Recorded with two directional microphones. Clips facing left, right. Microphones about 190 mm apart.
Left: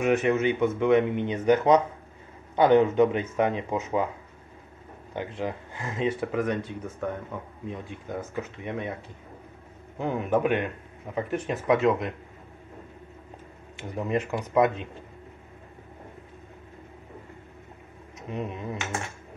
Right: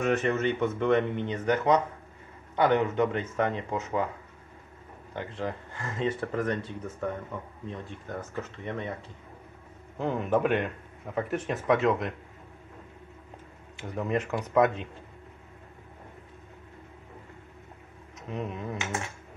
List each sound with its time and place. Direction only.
0.0 s speech: 10° left (ahead or behind)
5.1 s speech: 15° left (ahead or behind)
9.9 s speech: 5° left (ahead or behind)
13.9 s speech: centre (ahead or behind)
18.3 s speech: centre (ahead or behind)